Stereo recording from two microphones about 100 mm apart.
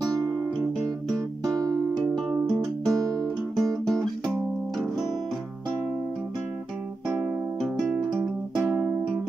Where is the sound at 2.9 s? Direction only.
35° right (ahead or behind).